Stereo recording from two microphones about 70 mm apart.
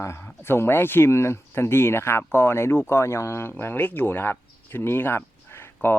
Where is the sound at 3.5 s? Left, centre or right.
Left.